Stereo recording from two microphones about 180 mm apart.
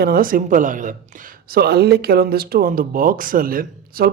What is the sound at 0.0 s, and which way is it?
Speech, 55° right (ahead or behind).